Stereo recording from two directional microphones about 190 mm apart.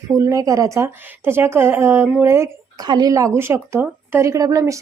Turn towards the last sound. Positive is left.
turn(degrees=-15)  # may be behind; listen again after turning